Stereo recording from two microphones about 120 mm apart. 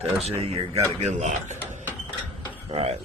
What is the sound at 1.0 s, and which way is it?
Speech, 70° right (ahead or behind).